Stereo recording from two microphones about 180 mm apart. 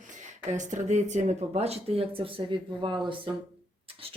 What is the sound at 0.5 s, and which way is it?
Speech, 40° right (ahead or behind).